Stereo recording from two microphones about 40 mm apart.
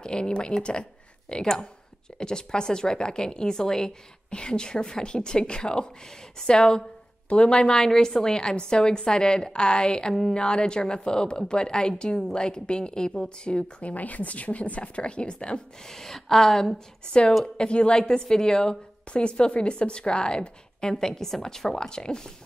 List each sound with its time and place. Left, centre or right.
0.0 s speech: left
7.7 s speech: centre
13.9 s a woman's voice: left
15.9 s a woman's voice: centre
17.6 s speech: left
20.9 s a woman's voice: centre